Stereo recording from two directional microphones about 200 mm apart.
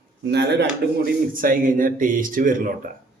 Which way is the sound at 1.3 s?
45° right (ahead or behind).